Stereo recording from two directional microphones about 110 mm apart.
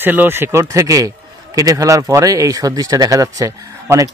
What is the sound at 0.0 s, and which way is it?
A man's voice, 20° right (ahead or behind).